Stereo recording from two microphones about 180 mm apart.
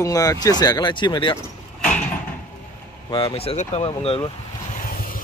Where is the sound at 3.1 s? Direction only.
30° left (ahead or behind).